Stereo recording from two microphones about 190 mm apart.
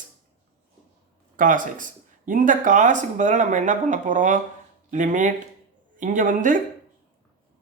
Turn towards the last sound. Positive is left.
turn(degrees=-45)  # may be behind; listen again after turning